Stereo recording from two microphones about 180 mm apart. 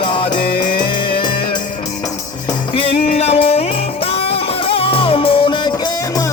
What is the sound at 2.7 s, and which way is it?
Music, 35° left (ahead or behind).